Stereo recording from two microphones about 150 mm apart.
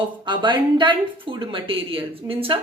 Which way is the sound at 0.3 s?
30° right (ahead or behind).